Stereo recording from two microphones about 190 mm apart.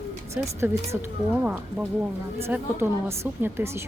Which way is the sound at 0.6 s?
15° right (ahead or behind).